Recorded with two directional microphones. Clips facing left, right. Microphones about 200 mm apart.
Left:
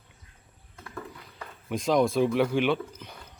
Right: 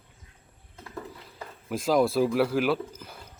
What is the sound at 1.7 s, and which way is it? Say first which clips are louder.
Speech: even; 5° right (ahead or behind).